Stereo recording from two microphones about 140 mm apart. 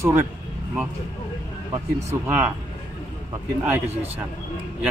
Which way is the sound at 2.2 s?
15° right (ahead or behind).